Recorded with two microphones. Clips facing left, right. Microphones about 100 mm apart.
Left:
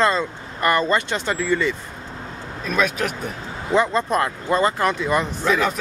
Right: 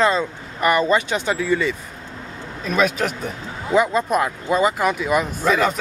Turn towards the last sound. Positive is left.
turn(degrees=-5)  # may be behind; listen again after turning